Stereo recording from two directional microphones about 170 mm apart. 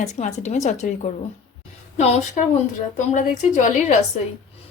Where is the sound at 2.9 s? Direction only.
45° left (ahead or behind).